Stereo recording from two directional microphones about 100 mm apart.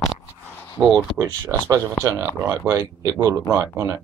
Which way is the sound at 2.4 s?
25° right (ahead or behind).